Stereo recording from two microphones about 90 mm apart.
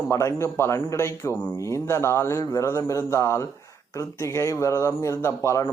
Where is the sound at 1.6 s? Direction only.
35° left (ahead or behind).